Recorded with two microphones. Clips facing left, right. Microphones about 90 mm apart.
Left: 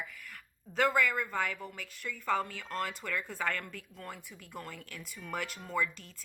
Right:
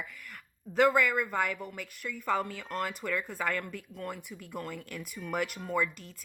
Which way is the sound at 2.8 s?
50° right (ahead or behind).